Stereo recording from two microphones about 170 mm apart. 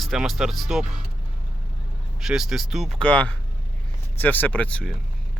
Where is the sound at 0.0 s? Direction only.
Centre (ahead or behind).